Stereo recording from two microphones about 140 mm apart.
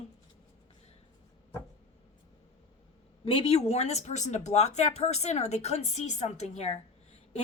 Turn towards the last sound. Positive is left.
turn(degrees=50)  # may be behind; listen again after turning